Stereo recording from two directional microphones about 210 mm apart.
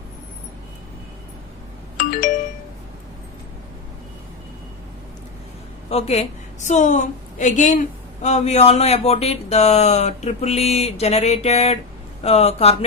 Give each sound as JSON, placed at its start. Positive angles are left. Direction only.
{"t": 2.0, "sound": "doorbell", "side_deg": 40}
{"t": 5.9, "sound": "a woman's voice", "side_deg": 30}